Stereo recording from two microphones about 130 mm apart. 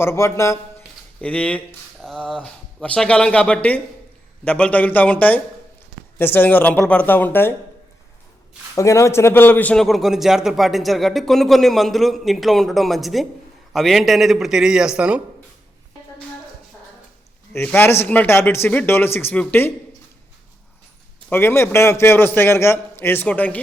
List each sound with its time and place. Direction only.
0.0 s speech: 20° left (ahead or behind)
1.2 s a man's voice: 10° left (ahead or behind)
8.7 s a man's voice: 25° left (ahead or behind); by 15.2 s 10° right (ahead or behind)
17.5 s a man's voice: 15° left (ahead or behind)
21.2 s a man's voice: 20° left (ahead or behind)